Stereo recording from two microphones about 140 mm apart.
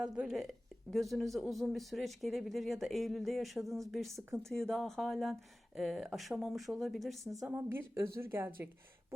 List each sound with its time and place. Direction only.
0.0 s speech: 5° right (ahead or behind)
7.5 s a woman's voice: 20° right (ahead or behind)